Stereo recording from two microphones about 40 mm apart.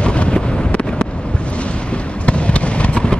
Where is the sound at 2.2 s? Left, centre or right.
Left.